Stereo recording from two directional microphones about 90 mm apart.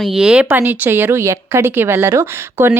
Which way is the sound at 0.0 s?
5° right (ahead or behind).